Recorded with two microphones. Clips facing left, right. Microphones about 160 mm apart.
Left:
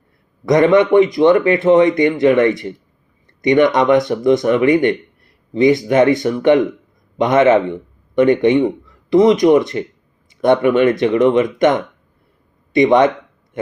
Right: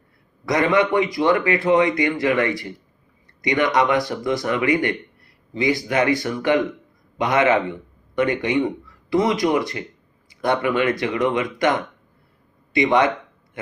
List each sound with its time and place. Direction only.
0.4 s a man's voice: 20° left (ahead or behind)
12.8 s speech: 20° left (ahead or behind)